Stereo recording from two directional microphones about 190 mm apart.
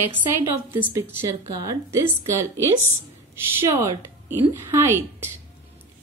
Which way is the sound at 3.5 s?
15° right (ahead or behind).